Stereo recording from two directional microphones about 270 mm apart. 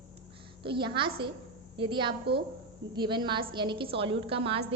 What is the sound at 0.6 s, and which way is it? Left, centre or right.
A woman's voice, centre.